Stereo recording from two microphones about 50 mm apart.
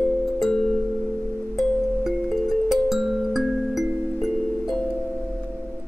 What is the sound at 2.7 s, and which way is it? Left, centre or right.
Music, centre.